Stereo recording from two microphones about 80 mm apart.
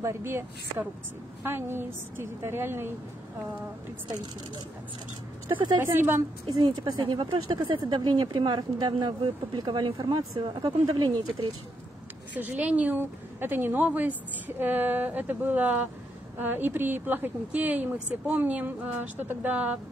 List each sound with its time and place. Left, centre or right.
0.0 s a woman's voice: right
5.5 s a woman's voice: right
5.8 s a woman's voice: right
6.5 s speech: right
7.6 s a woman's voice: right
12.4 s a woman's voice: right